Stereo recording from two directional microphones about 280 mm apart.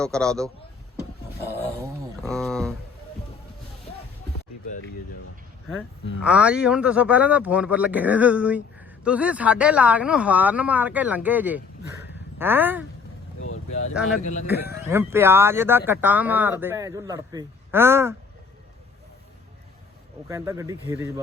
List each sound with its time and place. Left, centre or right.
0.0 s speech: centre
2.2 s a sound: centre
6.2 s speech: centre
14.2 s a man's voice: left
14.4 s speech: centre
20.2 s speech: centre